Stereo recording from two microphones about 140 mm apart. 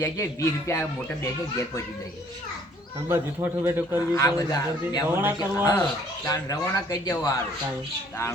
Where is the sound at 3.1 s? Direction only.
15° right (ahead or behind).